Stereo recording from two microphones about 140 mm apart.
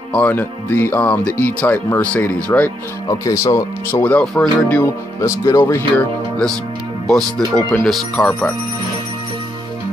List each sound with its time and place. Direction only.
0.1 s speech: 10° left (ahead or behind)
3.1 s speech: 25° left (ahead or behind)
4.0 s speech: 10° left (ahead or behind)
5.2 s speech: 20° left (ahead or behind); by 8.5 s 5° left (ahead or behind)